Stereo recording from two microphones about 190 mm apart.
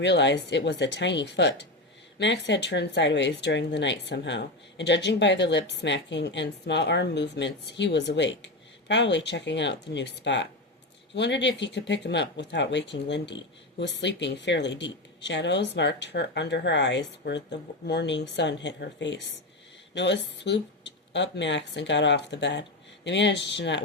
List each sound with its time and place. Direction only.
0.0 s speech: 70° left (ahead or behind)